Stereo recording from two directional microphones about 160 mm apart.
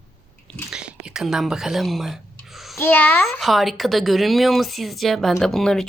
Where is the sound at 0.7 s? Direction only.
5° right (ahead or behind).